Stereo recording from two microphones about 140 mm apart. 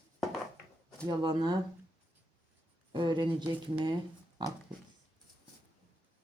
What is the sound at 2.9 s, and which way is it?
Speech, 35° right (ahead or behind).